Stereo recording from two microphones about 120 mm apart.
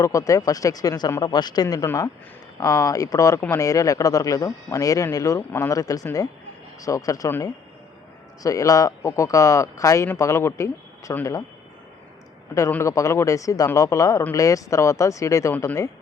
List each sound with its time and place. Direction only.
0.0 s speech: 25° left (ahead or behind)
12.8 s speech: 25° left (ahead or behind)